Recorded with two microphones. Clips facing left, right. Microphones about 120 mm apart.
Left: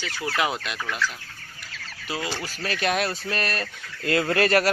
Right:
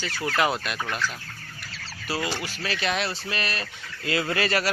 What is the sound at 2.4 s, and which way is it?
Speech, 45° left (ahead or behind).